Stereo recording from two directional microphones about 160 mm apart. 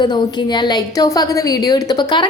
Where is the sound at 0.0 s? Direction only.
25° left (ahead or behind).